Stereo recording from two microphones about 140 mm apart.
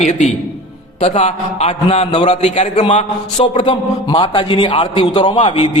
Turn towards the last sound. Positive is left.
turn(degrees=40)  # may be behind; listen again after turning